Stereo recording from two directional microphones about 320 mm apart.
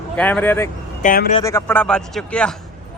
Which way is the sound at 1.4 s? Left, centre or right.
Centre.